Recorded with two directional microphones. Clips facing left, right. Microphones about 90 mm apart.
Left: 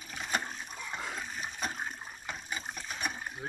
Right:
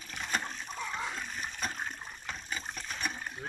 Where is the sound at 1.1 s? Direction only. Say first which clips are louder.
Even; 10° left (ahead or behind).